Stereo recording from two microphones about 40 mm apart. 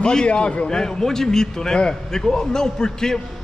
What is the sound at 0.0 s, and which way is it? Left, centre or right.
Speech, left.